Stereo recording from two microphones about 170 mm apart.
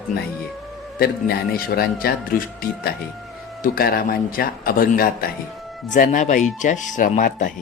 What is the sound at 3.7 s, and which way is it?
A man's voice, 60° left (ahead or behind).